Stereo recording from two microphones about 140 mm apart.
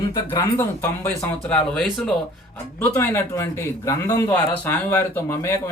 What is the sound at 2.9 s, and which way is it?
A man's voice, 20° left (ahead or behind).